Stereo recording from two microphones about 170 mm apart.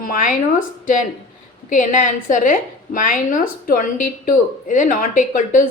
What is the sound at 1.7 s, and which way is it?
A woman's voice, 50° left (ahead or behind).